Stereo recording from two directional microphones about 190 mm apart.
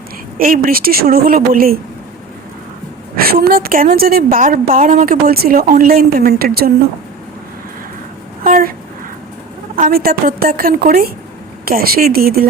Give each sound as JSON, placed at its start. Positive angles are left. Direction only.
{"t": 0.3, "sound": "a woman's voice", "side_deg": -50}
{"t": 3.2, "sound": "a woman's voice", "side_deg": -50}
{"t": 8.4, "sound": "speech", "side_deg": -50}
{"t": 9.7, "sound": "a woman's voice", "side_deg": -50}